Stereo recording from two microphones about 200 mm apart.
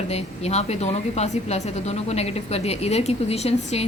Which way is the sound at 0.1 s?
30° left (ahead or behind).